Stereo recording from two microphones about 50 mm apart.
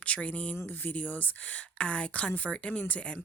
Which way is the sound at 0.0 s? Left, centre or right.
Left.